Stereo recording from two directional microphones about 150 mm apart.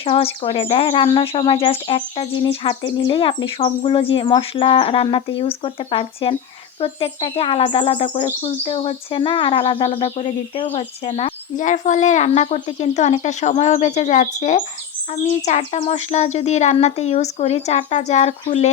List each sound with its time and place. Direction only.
0.0 s speech: 35° left (ahead or behind)
10.7 s speech: 50° left (ahead or behind)